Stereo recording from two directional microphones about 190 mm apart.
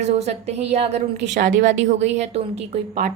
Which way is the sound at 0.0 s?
35° right (ahead or behind).